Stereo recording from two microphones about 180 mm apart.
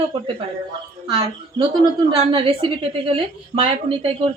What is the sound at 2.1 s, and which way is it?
Speech, 30° right (ahead or behind).